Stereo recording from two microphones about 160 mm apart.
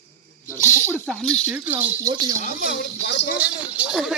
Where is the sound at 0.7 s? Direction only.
15° left (ahead or behind).